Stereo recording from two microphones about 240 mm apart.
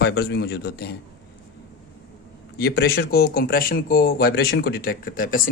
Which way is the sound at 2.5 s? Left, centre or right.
Left.